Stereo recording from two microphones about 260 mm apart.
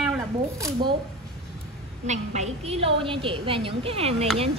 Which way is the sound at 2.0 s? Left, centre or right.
Right.